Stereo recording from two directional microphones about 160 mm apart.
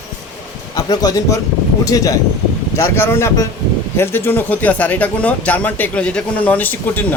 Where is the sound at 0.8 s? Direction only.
25° left (ahead or behind).